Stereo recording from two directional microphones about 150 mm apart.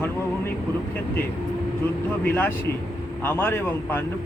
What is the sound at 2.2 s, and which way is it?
Speech, 15° left (ahead or behind).